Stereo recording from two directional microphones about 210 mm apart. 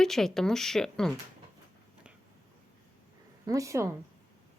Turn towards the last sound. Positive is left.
turn(degrees=-15)  # may be behind; listen again after turning